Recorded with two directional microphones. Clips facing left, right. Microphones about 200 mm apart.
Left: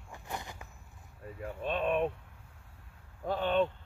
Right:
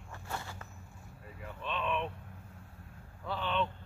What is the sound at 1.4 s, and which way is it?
Speech, 45° left (ahead or behind).